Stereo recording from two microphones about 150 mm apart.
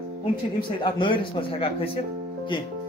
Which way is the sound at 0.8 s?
30° left (ahead or behind).